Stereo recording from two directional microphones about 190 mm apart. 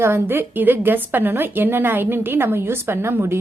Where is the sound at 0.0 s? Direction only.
10° right (ahead or behind).